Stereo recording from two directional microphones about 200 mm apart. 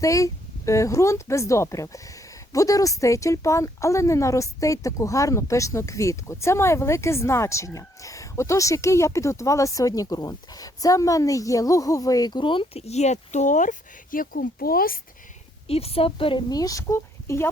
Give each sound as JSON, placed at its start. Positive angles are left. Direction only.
{"t": 0.0, "sound": "speech", "side_deg": 15}
{"t": 15.6, "sound": "a woman's voice", "side_deg": 30}